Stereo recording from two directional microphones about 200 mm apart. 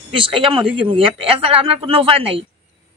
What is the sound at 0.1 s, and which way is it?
Speech, 25° right (ahead or behind).